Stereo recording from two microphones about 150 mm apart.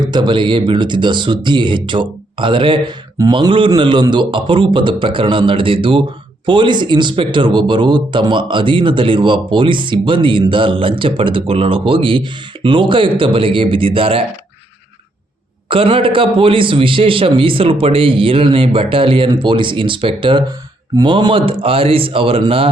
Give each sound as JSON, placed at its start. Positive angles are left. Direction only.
{"t": 0.0, "sound": "speech", "side_deg": -30}
{"t": 15.7, "sound": "speech", "side_deg": -35}